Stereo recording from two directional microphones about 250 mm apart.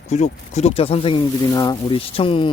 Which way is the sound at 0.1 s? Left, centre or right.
Left.